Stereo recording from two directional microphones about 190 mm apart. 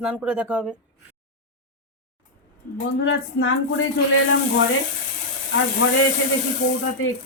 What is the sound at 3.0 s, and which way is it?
Speech, 90° left.